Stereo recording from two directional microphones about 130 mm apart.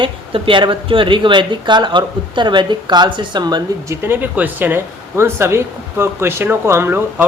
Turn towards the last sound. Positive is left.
turn(degrees=-15)  # may be behind; listen again after turning